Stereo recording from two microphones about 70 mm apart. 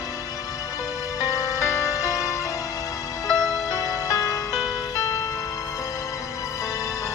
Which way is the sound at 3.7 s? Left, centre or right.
Left.